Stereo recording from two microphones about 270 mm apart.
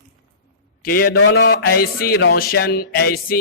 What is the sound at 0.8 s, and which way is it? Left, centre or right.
A man's voice, left.